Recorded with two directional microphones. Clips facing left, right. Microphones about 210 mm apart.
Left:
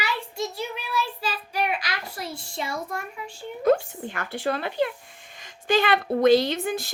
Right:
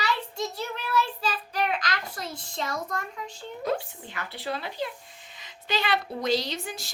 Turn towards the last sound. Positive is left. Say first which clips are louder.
# left 8 dB
turn(degrees=55)  # may be behind; listen again after turning